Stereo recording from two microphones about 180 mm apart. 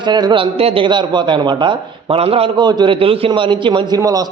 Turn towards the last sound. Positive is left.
turn(degrees=-20)  # may be behind; listen again after turning